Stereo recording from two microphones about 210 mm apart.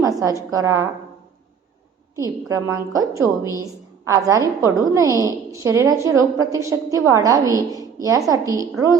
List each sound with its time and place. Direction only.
0.0 s a woman's voice: 15° right (ahead or behind)
2.1 s a woman's voice: 15° right (ahead or behind)